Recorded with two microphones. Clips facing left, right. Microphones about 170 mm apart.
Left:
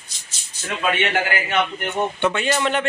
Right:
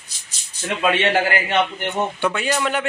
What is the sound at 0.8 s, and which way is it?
Speech, 30° right (ahead or behind).